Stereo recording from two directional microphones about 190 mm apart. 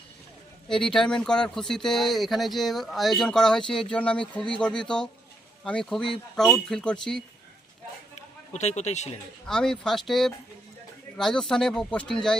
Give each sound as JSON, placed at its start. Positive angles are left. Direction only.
{"t": 0.7, "sound": "speech", "side_deg": 5}
{"t": 8.5, "sound": "a man's voice", "side_deg": 35}
{"t": 9.5, "sound": "speech", "side_deg": 0}